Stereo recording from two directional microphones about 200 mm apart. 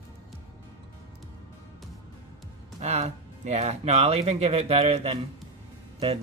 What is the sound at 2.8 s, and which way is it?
Speech, 35° right (ahead or behind).